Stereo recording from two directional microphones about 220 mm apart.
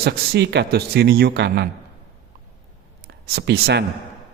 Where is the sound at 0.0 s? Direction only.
45° right (ahead or behind).